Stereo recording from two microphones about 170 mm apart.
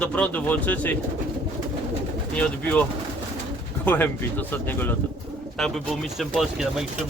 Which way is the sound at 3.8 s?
10° left (ahead or behind).